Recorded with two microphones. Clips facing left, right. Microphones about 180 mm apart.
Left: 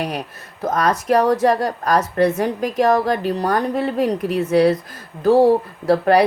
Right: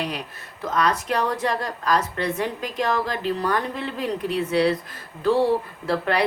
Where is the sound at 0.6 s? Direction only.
45° left (ahead or behind).